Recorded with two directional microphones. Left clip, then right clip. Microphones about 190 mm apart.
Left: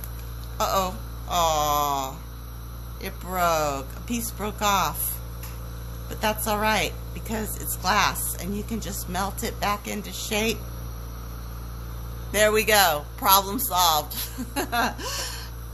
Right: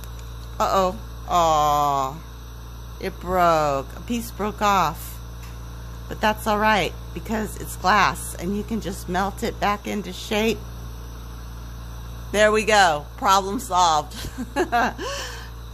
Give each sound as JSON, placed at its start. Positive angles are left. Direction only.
{"t": 0.6, "sound": "speech", "side_deg": -45}
{"t": 6.0, "sound": "speech", "side_deg": -45}
{"t": 12.3, "sound": "a man's voice", "side_deg": -40}